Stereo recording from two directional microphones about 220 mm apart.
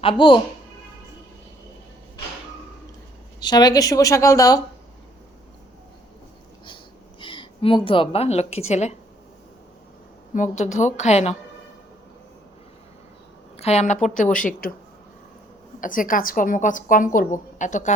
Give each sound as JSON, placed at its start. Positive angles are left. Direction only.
{"t": 0.0, "sound": "speech", "side_deg": 25}
{"t": 3.4, "sound": "speech", "side_deg": 20}
{"t": 7.2, "sound": "a woman's voice", "side_deg": 20}
{"t": 10.3, "sound": "a woman's voice", "side_deg": 35}
{"t": 13.6, "sound": "a woman's voice", "side_deg": 30}
{"t": 15.8, "sound": "a woman's voice", "side_deg": 40}